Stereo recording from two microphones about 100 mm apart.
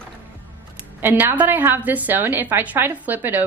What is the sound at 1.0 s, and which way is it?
A woman's voice, 20° right (ahead or behind).